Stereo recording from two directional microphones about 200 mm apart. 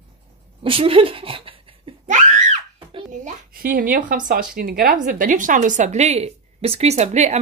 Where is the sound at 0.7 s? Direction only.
25° right (ahead or behind).